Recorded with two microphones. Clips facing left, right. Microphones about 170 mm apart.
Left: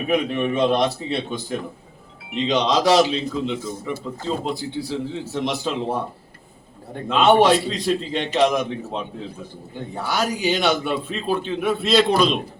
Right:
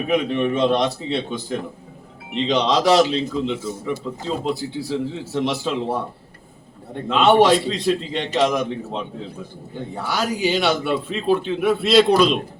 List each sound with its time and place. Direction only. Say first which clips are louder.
0.1 s a man's voice: right 1 dB; 5° left (ahead or behind)
3.6 s a man's voice: right 2 dB; 10° right (ahead or behind)
7.1 s a man's voice: right 1 dB; centre (ahead or behind)